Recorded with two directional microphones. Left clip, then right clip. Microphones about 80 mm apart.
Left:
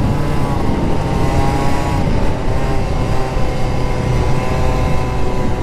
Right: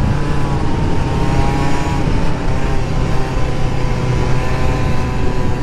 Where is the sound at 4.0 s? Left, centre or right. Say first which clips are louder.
Even; left.